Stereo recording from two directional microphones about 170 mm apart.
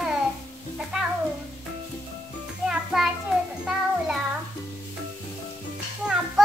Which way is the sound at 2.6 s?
Centre (ahead or behind).